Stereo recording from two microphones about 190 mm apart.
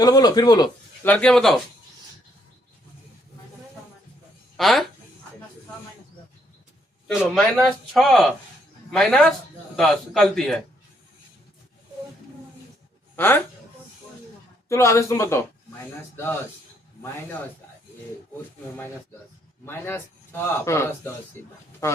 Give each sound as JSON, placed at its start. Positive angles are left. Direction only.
{"t": 0.0, "sound": "speech", "side_deg": 20}
{"t": 1.0, "sound": "speech", "side_deg": 5}
{"t": 4.5, "sound": "speech", "side_deg": 0}
{"t": 7.1, "sound": "speech", "side_deg": 0}
{"t": 13.1, "sound": "speech", "side_deg": 10}
{"t": 14.7, "sound": "speech", "side_deg": 15}
{"t": 19.6, "sound": "speech", "side_deg": 10}